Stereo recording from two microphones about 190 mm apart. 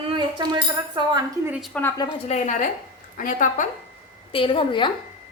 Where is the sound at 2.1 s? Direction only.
40° left (ahead or behind).